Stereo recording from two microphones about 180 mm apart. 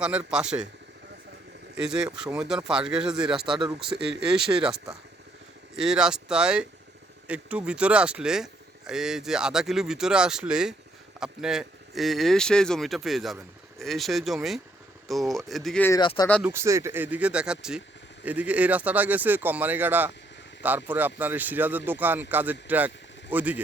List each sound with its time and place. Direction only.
0.0 s speech: 5° right (ahead or behind)
1.8 s speech: 5° right (ahead or behind)
4.0 s speech: 70° right (ahead or behind)
4.6 s speech: centre (ahead or behind)
16.0 s speech: 25° left (ahead or behind)
16.4 s speech: 15° right (ahead or behind)